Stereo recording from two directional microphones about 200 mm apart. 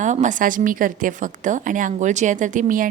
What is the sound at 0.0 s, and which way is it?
A woman's voice, 35° right (ahead or behind).